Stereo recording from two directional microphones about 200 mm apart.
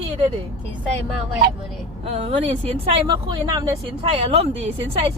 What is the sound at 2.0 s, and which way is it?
Speech, 30° right (ahead or behind).